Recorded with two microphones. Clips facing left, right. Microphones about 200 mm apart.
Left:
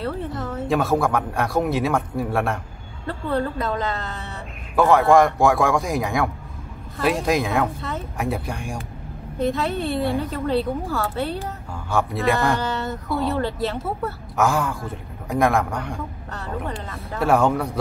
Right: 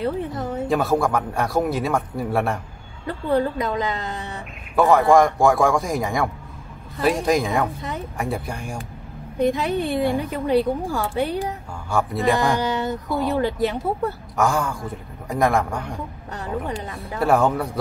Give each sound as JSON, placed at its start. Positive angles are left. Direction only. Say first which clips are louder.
{"t": 0.0, "sound": "speech", "louder": "right 3 dB", "side_deg": -15}
{"t": 0.7, "sound": "speech", "louder": "even", "side_deg": 0}
{"t": 3.1, "sound": "a woman's voice", "louder": "right 3 dB", "side_deg": -15}
{"t": 4.7, "sound": "speech", "louder": "even", "side_deg": 0}
{"t": 9.4, "sound": "a woman's voice", "louder": "right 2 dB", "side_deg": -15}
{"t": 11.9, "sound": "speech", "louder": "even", "side_deg": 0}
{"t": 12.4, "sound": "a woman's voice", "louder": "right 1 dB", "side_deg": -15}
{"t": 14.3, "sound": "speech", "louder": "left 2 dB", "side_deg": 0}
{"t": 16.3, "sound": "a woman's voice", "louder": "right 3 dB", "side_deg": -15}
{"t": 17.2, "sound": "speech", "louder": "even", "side_deg": 0}